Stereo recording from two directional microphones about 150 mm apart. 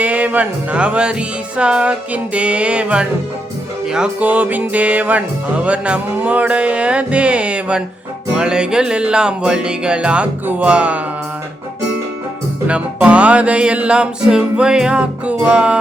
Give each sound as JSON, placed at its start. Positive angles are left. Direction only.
{"t": 0.0, "sound": "music", "side_deg": -10}
{"t": 8.4, "sound": "speech", "side_deg": -5}
{"t": 12.6, "sound": "music", "side_deg": -10}